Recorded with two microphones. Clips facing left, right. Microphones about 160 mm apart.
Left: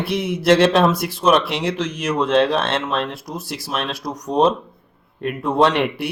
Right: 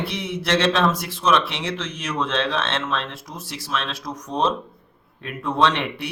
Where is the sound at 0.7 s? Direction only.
40° left (ahead or behind).